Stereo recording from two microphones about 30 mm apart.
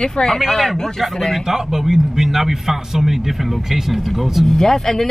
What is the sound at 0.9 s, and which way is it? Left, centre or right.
Speech, centre.